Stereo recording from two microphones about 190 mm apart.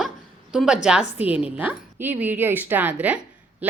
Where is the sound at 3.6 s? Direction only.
10° right (ahead or behind).